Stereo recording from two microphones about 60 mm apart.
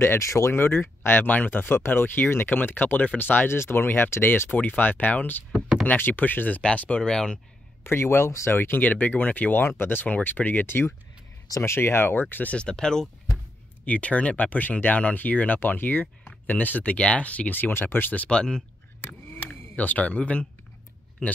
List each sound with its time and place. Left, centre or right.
0.0 s speech: left
0.6 s speech: left
3.4 s speech: left
5.5 s a sound: centre
5.9 s speech: left; by 7.3 s centre
7.8 s speech: left
12.5 s speech: centre
13.8 s speech: left
18.3 s speech: centre
19.0 s a sound: left